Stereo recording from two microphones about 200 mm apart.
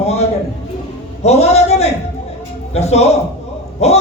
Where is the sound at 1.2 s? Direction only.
30° left (ahead or behind).